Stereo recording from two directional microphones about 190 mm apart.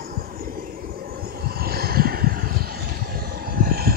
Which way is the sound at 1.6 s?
55° right (ahead or behind).